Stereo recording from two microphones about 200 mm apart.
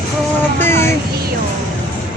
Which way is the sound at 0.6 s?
10° left (ahead or behind).